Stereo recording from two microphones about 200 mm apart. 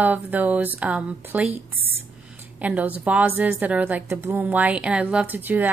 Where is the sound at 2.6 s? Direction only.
10° right (ahead or behind).